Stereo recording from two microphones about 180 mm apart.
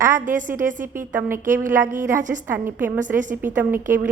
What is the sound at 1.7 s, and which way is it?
Speech, 50° right (ahead or behind).